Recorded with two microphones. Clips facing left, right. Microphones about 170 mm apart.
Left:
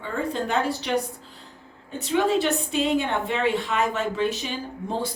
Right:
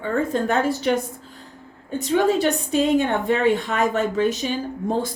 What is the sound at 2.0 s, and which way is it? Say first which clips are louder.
A woman's voice: right 3 dB; 45° right (ahead or behind).